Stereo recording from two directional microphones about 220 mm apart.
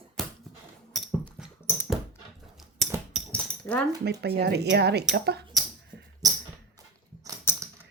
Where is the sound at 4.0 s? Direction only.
50° right (ahead or behind).